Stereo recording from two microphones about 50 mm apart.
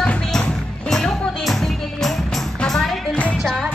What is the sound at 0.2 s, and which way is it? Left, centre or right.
Music, centre.